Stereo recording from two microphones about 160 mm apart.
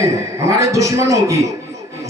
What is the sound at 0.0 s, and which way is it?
A man's voice, 20° right (ahead or behind).